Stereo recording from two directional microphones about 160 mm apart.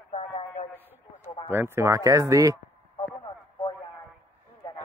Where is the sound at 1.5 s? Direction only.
15° right (ahead or behind).